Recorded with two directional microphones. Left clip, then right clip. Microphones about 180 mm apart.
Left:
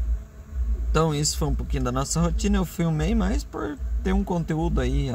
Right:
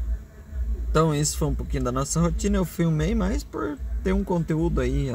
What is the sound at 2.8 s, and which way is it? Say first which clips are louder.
Speech: right 1 dB; 15° right (ahead or behind).